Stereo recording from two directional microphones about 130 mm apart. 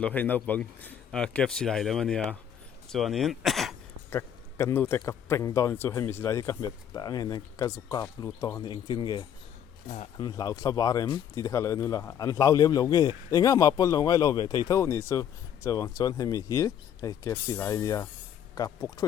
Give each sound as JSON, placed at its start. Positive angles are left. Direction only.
{"t": 0.0, "sound": "speech", "side_deg": 10}
{"t": 4.1, "sound": "a man's voice", "side_deg": 20}